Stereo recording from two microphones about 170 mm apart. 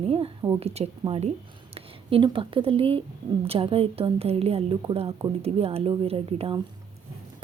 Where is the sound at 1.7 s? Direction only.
35° right (ahead or behind).